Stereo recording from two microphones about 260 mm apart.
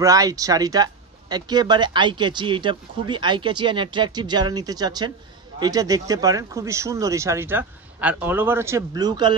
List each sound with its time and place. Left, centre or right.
0.0 s speech: centre